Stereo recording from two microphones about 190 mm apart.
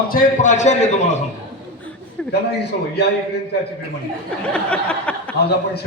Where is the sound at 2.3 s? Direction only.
60° left (ahead or behind).